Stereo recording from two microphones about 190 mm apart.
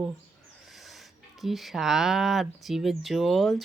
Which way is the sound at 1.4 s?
Centre (ahead or behind).